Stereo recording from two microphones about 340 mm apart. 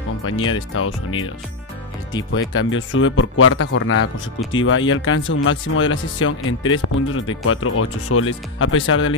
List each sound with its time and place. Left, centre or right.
0.2 s speech: left
2.3 s speech: left